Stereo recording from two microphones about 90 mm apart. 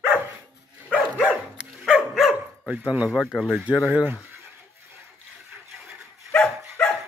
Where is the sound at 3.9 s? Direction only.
15° right (ahead or behind).